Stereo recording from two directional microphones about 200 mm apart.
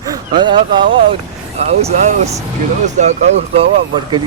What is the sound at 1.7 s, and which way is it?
Speech, 35° right (ahead or behind).